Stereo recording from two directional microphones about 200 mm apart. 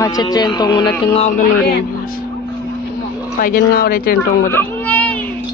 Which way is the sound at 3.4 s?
50° left (ahead or behind).